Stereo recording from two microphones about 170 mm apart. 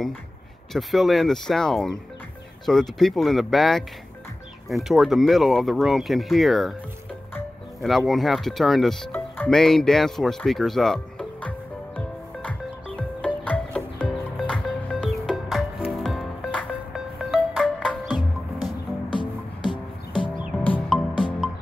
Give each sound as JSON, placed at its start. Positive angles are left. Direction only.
{"t": 0.7, "sound": "speech", "side_deg": 0}
{"t": 8.1, "sound": "speech", "side_deg": 0}
{"t": 9.1, "sound": "music", "side_deg": 5}
{"t": 19.7, "sound": "music", "side_deg": 30}
{"t": 20.6, "sound": "music", "side_deg": 5}